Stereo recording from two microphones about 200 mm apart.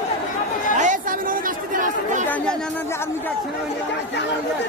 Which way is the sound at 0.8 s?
40° right (ahead or behind).